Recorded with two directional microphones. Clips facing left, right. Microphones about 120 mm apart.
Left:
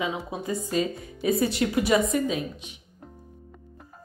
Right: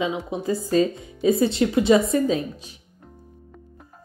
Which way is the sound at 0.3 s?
30° right (ahead or behind).